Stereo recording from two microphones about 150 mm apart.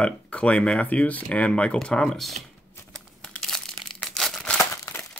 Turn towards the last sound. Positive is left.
turn(degrees=20)  # may be behind; listen again after turning